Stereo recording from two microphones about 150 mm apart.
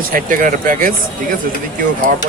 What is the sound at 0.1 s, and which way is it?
Speech, 65° right (ahead or behind).